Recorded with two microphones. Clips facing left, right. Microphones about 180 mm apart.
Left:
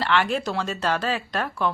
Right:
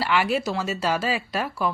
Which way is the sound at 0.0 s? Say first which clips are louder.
Even; 10° right (ahead or behind).